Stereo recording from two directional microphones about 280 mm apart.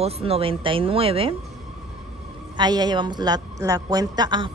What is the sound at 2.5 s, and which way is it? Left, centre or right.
A woman's voice, centre.